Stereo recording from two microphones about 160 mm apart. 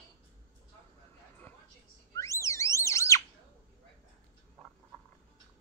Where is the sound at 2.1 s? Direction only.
20° left (ahead or behind).